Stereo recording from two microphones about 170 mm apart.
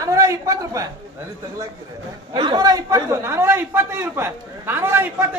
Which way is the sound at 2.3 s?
30° right (ahead or behind).